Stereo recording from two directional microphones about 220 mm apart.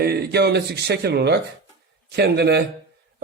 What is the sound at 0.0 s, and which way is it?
A man's voice, 45° right (ahead or behind).